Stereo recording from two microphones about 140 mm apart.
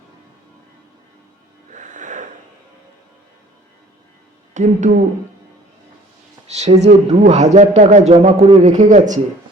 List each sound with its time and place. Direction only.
1.7 s music: 65° right (ahead or behind)
4.5 s speech: 60° right (ahead or behind)
6.6 s speech: 55° right (ahead or behind)